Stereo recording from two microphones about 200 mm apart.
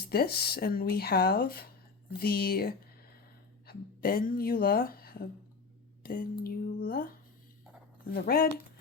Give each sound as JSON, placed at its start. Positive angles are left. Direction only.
{"t": 0.0, "sound": "speech", "side_deg": 50}
{"t": 8.1, "sound": "speech", "side_deg": 50}